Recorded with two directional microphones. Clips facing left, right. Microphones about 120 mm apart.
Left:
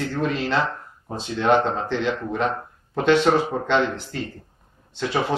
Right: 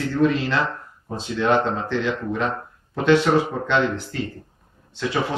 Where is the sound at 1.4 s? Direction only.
20° left (ahead or behind).